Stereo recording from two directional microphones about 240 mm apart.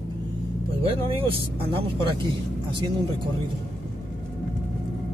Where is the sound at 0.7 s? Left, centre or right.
Right.